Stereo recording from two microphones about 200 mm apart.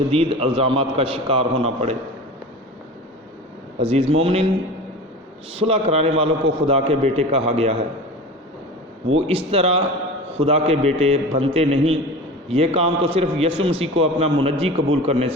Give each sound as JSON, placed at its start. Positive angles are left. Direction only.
{"t": 0.1, "sound": "a man's voice", "side_deg": -30}
{"t": 3.8, "sound": "a man's voice", "side_deg": -30}
{"t": 5.5, "sound": "a man's voice", "side_deg": -30}
{"t": 9.1, "sound": "a man's voice", "side_deg": -30}